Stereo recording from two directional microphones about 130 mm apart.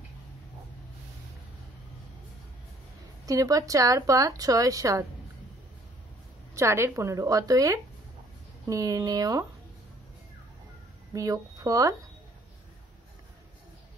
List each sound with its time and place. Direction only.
3.3 s speech: 25° right (ahead or behind)
6.5 s speech: 20° right (ahead or behind)
11.1 s speech: 25° right (ahead or behind)